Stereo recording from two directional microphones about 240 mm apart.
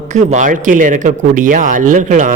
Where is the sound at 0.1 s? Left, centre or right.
Right.